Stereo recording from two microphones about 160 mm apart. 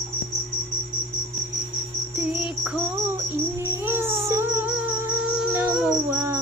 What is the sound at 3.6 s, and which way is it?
Music, 15° right (ahead or behind).